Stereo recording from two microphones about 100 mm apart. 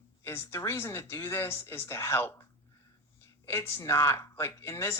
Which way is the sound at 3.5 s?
25° left (ahead or behind).